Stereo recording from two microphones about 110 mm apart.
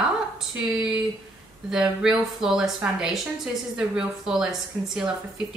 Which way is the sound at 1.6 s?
5° right (ahead or behind).